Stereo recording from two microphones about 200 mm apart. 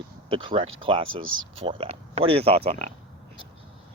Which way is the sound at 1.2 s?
80° right.